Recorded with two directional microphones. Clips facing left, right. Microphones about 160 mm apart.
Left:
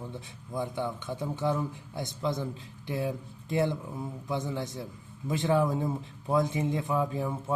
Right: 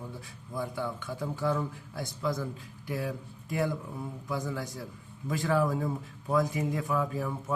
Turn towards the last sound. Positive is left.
turn(degrees=25)  # may be behind; listen again after turning